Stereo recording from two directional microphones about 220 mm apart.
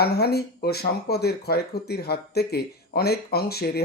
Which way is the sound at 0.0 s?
45° left (ahead or behind).